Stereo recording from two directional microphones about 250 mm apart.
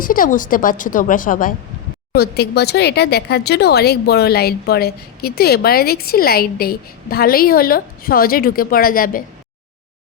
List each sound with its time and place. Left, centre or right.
0.0 s speech: left